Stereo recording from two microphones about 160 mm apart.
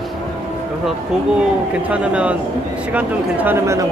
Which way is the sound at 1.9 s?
10° right (ahead or behind).